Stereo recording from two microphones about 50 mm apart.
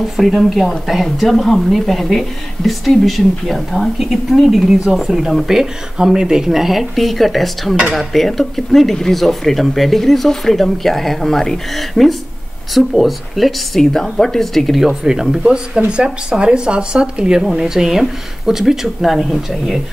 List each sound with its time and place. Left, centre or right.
0.2 s speech: centre
13.9 s speech: centre
14.9 s speech: centre